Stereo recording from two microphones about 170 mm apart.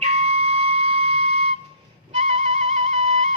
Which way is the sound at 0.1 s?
35° right (ahead or behind).